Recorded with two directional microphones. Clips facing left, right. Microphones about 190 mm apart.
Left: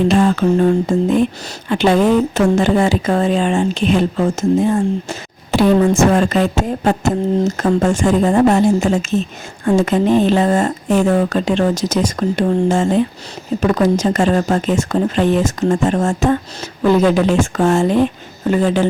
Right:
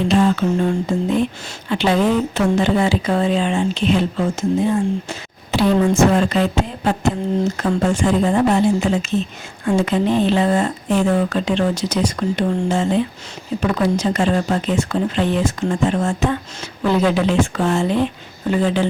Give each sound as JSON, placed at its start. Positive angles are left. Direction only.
{"t": 0.1, "sound": "speech", "side_deg": 50}